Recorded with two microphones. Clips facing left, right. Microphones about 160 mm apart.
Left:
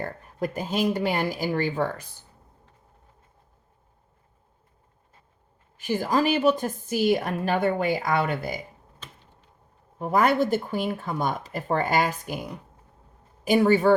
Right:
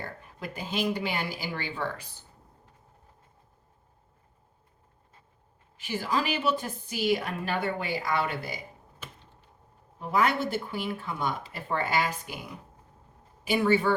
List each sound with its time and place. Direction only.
0.0 s speech: 45° left (ahead or behind)
5.7 s speech: 45° left (ahead or behind)
10.0 s speech: 45° left (ahead or behind)
13.4 s speech: 40° left (ahead or behind)